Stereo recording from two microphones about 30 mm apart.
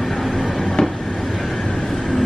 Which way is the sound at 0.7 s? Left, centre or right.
Centre.